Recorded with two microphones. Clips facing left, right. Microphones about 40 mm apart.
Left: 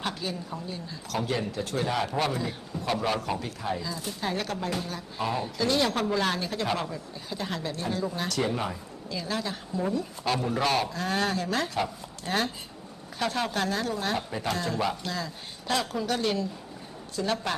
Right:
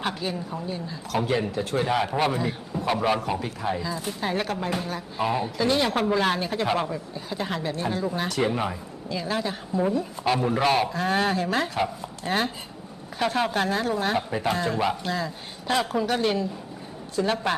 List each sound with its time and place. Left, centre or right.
0.0 s speech: right